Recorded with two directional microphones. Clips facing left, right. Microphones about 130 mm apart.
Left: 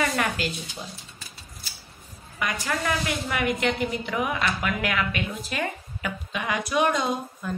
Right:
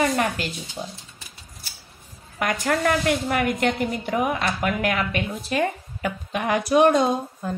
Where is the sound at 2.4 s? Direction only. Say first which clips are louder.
Right 6 dB; 50° right (ahead or behind).